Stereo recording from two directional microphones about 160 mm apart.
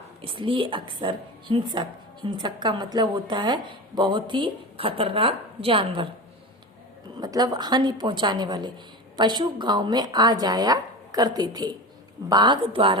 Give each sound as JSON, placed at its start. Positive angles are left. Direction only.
{"t": 0.2, "sound": "a woman's voice", "side_deg": -35}
{"t": 7.2, "sound": "a woman's voice", "side_deg": -25}